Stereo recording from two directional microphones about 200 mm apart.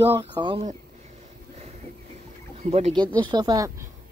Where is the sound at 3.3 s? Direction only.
20° right (ahead or behind).